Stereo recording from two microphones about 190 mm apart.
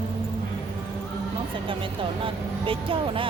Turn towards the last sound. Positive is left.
turn(degrees=-25)  # may be behind; listen again after turning